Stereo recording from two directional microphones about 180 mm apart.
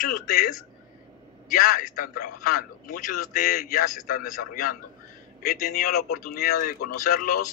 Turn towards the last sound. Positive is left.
turn(degrees=55)  # may be behind; listen again after turning